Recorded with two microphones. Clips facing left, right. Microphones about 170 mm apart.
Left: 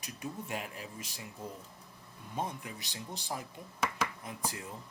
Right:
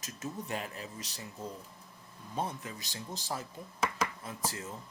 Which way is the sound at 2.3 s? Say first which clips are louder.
Right 1 dB; 15° left (ahead or behind).